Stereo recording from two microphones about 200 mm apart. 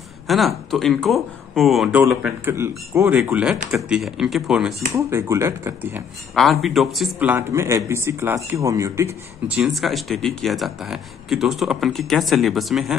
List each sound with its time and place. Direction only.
0.3 s a man's voice: centre (ahead or behind)
4.9 s a man's voice: 15° right (ahead or behind)
9.6 s speech: centre (ahead or behind)